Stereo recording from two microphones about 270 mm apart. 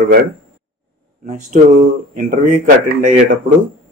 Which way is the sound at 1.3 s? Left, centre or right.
Right.